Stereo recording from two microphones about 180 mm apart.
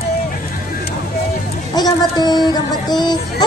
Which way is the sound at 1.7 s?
20° left (ahead or behind).